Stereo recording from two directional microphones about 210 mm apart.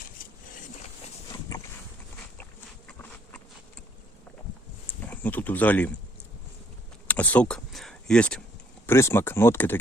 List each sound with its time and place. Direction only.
0.2 s a sound: 40° left (ahead or behind)
5.0 s speech: 10° left (ahead or behind)
7.1 s speech: 5° left (ahead or behind)